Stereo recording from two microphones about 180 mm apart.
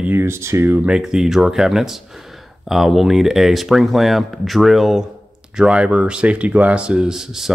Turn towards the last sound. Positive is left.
turn(degrees=-5)  # may be behind; listen again after turning